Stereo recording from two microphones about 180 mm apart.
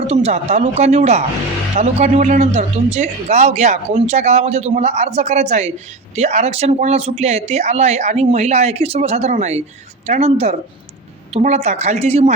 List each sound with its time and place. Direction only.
0.1 s speech: 35° right (ahead or behind)